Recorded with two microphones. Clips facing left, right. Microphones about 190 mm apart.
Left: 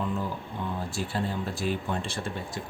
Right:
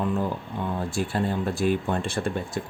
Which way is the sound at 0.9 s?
55° right (ahead or behind).